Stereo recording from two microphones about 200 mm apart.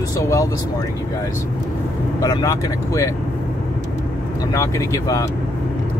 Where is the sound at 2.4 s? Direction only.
15° left (ahead or behind).